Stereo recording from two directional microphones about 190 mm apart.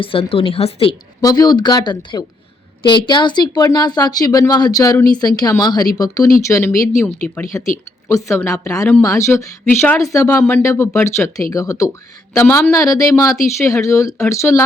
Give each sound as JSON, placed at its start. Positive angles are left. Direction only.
{"t": 0.0, "sound": "a woman's voice", "side_deg": 30}